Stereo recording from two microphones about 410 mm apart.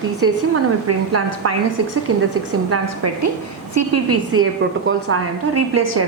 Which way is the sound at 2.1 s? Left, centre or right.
Right.